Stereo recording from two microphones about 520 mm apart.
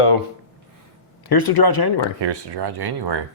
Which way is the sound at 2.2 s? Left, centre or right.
Right.